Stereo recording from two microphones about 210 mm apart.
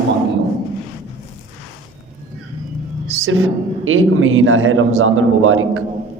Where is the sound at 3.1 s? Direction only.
75° right (ahead or behind).